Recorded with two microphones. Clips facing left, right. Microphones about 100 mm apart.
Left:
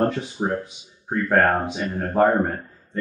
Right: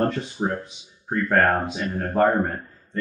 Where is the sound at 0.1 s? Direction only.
5° left (ahead or behind).